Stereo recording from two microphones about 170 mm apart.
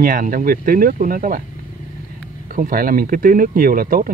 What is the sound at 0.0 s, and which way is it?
Speech, 55° right (ahead or behind).